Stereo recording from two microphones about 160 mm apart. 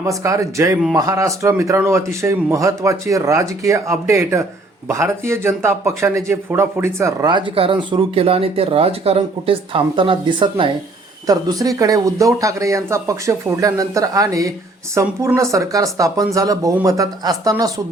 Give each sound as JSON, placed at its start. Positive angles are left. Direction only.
{"t": 0.0, "sound": "a man's voice", "side_deg": -20}